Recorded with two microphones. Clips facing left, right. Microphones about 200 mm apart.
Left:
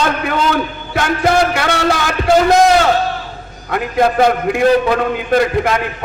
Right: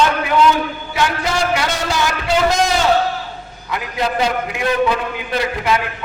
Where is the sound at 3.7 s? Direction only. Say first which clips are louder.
Left 7 dB; 50° left (ahead or behind).